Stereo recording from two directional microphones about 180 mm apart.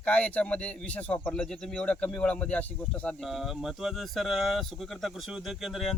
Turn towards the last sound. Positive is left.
turn(degrees=0)  # may be behind; listen again after turning